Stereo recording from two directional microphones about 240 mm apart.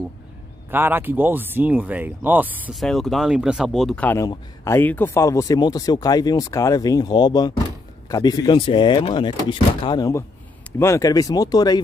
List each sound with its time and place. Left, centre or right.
0.7 s speech: centre